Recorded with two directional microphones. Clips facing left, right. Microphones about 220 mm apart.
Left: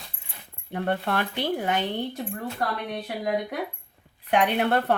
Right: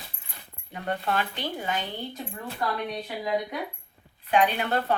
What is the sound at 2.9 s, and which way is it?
Speech, 55° left (ahead or behind).